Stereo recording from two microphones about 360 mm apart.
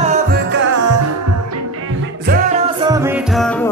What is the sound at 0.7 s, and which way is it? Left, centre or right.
Music, right.